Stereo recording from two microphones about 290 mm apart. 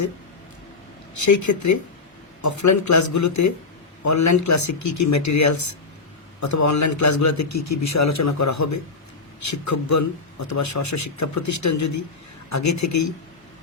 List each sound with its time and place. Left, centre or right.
1.1 s a man's voice: left